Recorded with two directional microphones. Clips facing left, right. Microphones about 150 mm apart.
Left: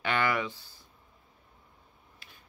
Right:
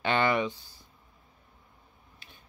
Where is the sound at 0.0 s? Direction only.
25° right (ahead or behind).